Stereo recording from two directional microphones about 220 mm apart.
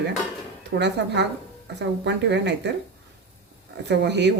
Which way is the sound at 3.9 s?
50° right (ahead or behind).